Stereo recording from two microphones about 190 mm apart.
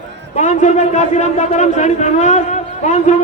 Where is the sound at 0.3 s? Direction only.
40° left (ahead or behind).